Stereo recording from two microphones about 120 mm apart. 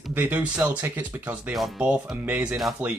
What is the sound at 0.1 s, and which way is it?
Speech, 15° right (ahead or behind).